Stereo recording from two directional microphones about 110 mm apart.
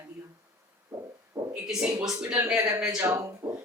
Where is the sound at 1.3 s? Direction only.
35° right (ahead or behind).